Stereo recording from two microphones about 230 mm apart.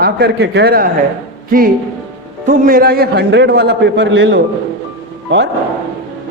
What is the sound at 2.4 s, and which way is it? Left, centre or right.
A man's voice, right.